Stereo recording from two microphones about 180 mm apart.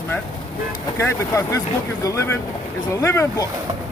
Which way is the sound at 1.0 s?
15° left (ahead or behind).